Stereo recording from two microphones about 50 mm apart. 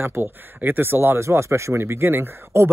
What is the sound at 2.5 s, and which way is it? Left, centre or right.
Speech, right.